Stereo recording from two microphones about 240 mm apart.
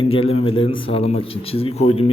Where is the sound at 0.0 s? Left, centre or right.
Left.